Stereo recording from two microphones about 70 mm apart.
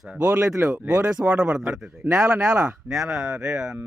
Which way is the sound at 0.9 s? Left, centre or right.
Centre.